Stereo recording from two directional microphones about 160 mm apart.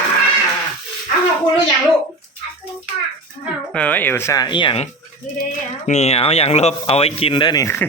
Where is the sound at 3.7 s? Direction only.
10° left (ahead or behind); by 4.8 s 30° left (ahead or behind).